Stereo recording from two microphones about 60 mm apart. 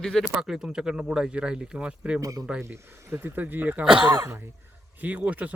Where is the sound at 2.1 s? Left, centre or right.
Right.